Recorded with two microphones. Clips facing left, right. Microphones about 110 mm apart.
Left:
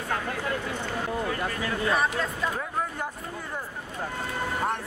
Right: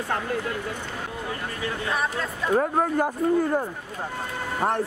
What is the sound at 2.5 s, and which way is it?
Speech, 50° right (ahead or behind).